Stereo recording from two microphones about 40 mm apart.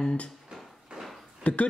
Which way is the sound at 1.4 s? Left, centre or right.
Left.